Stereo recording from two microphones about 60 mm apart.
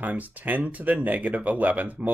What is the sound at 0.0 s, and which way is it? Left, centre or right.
Speech, right.